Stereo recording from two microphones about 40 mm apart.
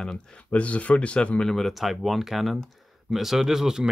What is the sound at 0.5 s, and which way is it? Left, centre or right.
Speech, left.